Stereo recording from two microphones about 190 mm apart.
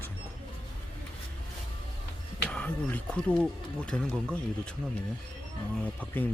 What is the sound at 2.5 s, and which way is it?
Speech, 5° left (ahead or behind).